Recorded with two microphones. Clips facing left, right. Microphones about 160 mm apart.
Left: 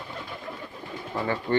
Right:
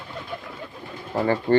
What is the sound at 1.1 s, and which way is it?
Speech, 35° right (ahead or behind).